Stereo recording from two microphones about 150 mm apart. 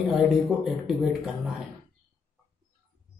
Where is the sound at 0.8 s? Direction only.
5° right (ahead or behind).